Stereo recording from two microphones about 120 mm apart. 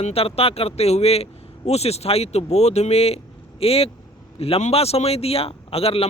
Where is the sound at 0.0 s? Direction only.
55° left (ahead or behind).